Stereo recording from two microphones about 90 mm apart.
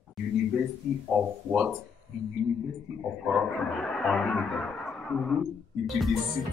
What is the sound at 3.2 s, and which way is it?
Speech, centre (ahead or behind).